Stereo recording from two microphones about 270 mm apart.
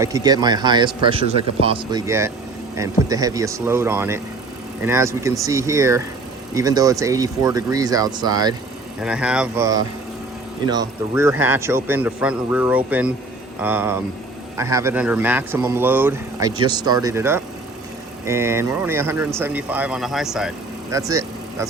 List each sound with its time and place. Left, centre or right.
0.0 s a man's voice: centre
9.0 s a man's voice: centre